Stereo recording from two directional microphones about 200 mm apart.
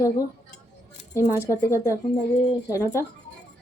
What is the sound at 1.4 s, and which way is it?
Speech, 15° left (ahead or behind).